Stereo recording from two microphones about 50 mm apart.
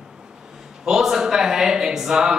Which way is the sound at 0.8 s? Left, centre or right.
Centre.